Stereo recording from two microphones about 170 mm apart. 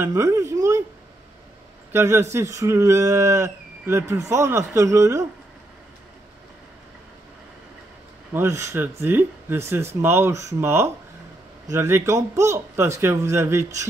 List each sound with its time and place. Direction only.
0.0 s speech: 15° right (ahead or behind)
1.9 s speech: 15° right (ahead or behind)
8.3 s speech: 15° right (ahead or behind)